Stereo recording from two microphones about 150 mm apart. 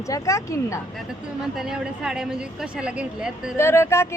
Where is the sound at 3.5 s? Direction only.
20° left (ahead or behind).